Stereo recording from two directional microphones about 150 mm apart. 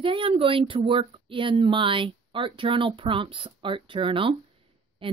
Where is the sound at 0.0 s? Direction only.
35° right (ahead or behind).